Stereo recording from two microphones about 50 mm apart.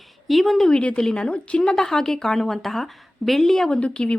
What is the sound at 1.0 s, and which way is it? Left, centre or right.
Speech, centre.